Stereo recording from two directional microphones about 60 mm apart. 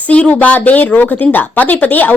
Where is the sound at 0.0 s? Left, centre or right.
Left.